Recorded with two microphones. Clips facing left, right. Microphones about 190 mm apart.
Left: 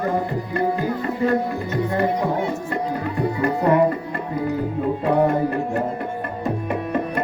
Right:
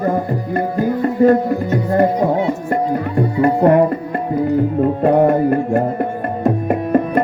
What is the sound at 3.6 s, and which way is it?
Tabla, 55° right (ahead or behind).